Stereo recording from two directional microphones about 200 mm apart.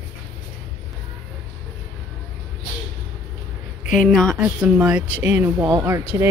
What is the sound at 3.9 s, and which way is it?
Speech, centre (ahead or behind).